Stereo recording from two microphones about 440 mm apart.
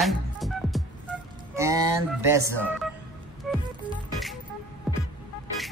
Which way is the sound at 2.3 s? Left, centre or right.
Centre.